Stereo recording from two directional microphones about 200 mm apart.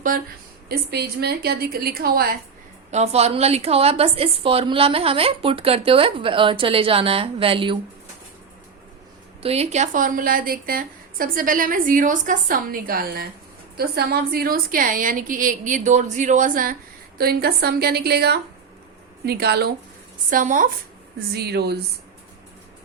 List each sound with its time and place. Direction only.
0.1 s a woman's voice: 45° right (ahead or behind)
0.7 s a woman's voice: 55° right (ahead or behind)
2.9 s a woman's voice: 30° right (ahead or behind)
9.4 s a woman's voice: 30° right (ahead or behind); by 19.7 s 55° right (ahead or behind)
20.3 s speech: 40° right (ahead or behind)
21.3 s a woman's voice: 55° right (ahead or behind)